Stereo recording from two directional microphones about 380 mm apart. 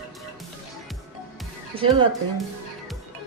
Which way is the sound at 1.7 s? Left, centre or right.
Centre.